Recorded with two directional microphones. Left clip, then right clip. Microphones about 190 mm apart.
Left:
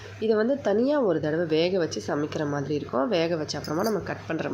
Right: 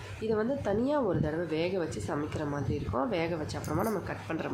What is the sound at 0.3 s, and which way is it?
Speech, 20° left (ahead or behind).